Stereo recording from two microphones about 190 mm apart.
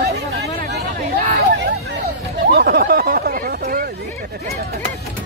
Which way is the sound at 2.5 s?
55° right (ahead or behind).